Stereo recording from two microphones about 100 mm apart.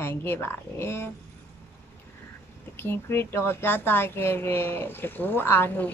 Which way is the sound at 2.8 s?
20° left (ahead or behind).